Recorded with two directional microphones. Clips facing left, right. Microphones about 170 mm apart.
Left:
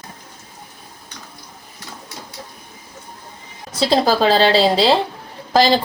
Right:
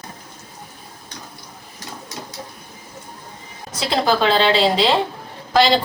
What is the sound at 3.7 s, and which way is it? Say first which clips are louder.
A woman's voice: left 3 dB; 35° left (ahead or behind).